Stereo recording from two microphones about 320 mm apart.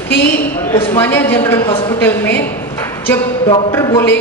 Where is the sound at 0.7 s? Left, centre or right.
Centre.